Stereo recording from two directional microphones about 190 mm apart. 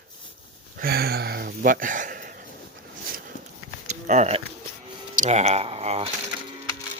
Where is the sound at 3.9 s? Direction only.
35° right (ahead or behind).